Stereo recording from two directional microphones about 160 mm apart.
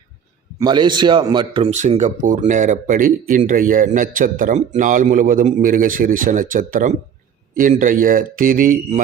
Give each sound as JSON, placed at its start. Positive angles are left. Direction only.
{"t": 0.6, "sound": "a man's voice", "side_deg": -30}
{"t": 1.7, "sound": "speech", "side_deg": -50}